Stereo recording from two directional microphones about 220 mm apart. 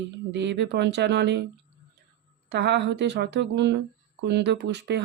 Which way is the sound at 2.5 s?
50° right (ahead or behind).